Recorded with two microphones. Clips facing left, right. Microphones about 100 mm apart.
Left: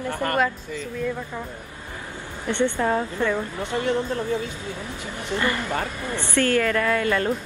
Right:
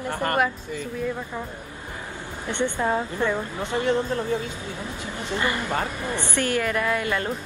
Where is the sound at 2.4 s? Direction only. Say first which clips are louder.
Left 2 dB; 15° right (ahead or behind).